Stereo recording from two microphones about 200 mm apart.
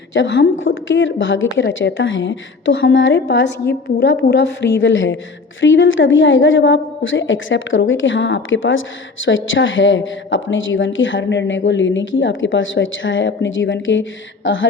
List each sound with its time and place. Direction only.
0.1 s a woman's voice: 65° left (ahead or behind)